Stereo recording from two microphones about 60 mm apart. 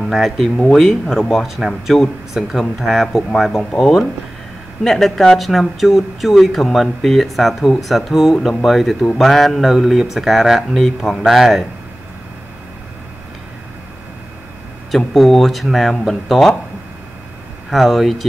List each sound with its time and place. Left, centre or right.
0.0 s speech: centre
4.8 s speech: centre
14.9 s speech: centre
17.6 s speech: centre